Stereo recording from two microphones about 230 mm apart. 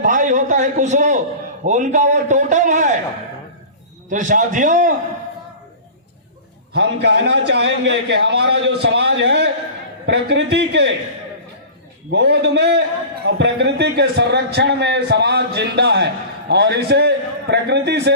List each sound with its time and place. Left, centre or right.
0.0 s a man's voice: right
4.1 s a man's voice: right
6.7 s a man's voice: right
12.1 s a man's voice: right